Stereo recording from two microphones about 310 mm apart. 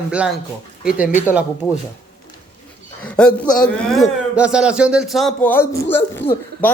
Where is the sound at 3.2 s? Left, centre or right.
Centre.